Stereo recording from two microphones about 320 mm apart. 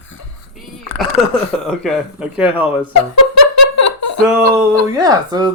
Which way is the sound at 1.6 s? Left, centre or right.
Centre.